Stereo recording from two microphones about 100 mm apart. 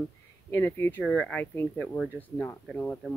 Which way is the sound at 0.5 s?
20° left (ahead or behind).